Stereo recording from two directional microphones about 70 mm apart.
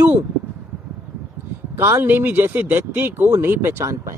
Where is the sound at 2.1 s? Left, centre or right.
Right.